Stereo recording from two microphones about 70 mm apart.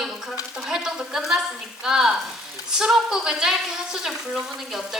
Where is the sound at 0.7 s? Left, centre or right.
Centre.